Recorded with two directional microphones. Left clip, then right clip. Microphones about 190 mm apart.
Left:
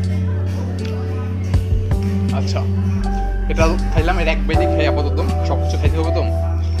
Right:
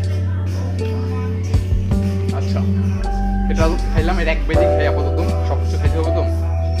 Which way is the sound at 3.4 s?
30° left (ahead or behind).